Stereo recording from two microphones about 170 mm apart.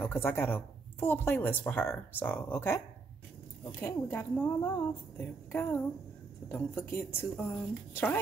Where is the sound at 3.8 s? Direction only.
10° left (ahead or behind).